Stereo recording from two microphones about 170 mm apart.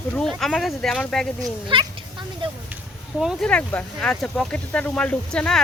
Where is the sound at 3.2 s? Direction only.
5° left (ahead or behind).